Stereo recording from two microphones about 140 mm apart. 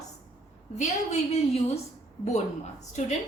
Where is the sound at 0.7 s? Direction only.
50° left (ahead or behind).